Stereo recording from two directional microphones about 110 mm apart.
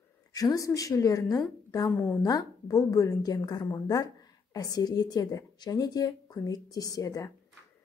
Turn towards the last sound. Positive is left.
turn(degrees=30)  # may be behind; listen again after turning